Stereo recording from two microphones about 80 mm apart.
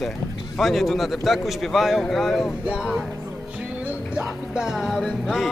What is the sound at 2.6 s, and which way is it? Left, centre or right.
Speech, centre.